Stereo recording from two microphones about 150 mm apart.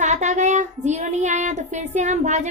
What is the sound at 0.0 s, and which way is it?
A woman's voice, 50° right (ahead or behind).